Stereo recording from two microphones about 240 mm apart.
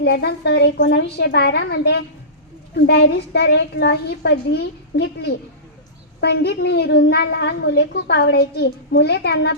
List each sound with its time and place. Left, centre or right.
0.0 s a woman's voice: left